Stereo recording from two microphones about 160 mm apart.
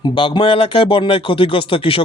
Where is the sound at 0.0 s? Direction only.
30° left (ahead or behind).